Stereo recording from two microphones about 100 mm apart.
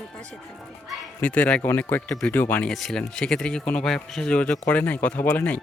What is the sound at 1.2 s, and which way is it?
Speech, 15° left (ahead or behind).